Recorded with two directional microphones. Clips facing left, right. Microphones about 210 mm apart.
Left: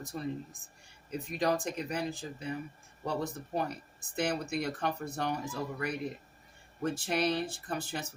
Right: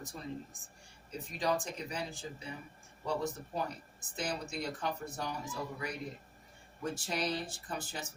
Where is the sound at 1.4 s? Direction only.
65° left (ahead or behind).